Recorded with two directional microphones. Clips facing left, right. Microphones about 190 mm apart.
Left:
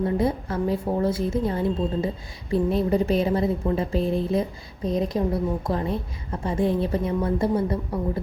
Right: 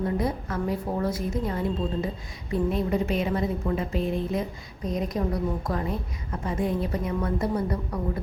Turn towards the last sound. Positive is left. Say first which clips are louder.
# left 4 dB
turn(degrees=25)  # may be behind; listen again after turning